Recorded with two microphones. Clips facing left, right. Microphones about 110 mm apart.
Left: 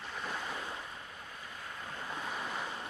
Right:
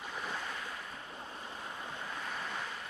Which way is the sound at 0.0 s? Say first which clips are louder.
Even; 5° right (ahead or behind).